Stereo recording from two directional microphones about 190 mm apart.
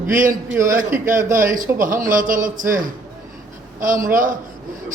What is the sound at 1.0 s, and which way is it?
A man's voice, 45° right (ahead or behind).